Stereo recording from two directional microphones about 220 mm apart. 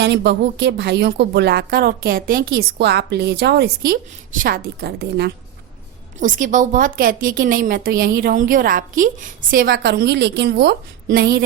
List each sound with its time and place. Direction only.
0.0 s a woman's voice: 50° right (ahead or behind)
6.1 s a woman's voice: 35° right (ahead or behind)